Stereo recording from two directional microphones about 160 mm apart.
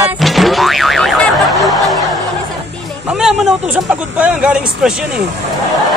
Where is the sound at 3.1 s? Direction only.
5° right (ahead or behind).